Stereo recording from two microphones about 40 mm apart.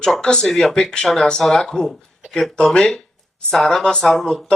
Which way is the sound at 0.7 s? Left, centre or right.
Left.